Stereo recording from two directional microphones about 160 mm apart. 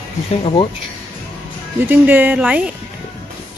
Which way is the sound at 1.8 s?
10° right (ahead or behind).